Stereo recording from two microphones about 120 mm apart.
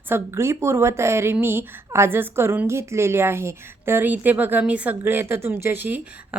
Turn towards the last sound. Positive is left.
turn(degrees=-15)  # may be behind; listen again after turning